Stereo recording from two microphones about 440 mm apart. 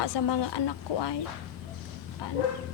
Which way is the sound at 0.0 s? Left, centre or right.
Left.